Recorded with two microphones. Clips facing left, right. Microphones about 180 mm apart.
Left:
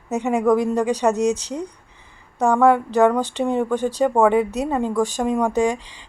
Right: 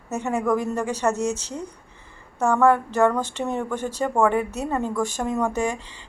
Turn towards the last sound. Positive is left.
turn(degrees=15)  # may be behind; listen again after turning